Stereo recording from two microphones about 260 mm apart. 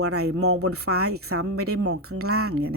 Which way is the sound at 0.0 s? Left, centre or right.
Right.